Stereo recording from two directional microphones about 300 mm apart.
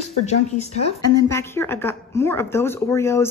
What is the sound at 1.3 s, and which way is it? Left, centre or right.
Speech, centre.